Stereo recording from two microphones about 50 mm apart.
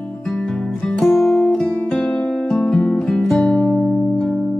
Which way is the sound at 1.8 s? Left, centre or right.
Centre.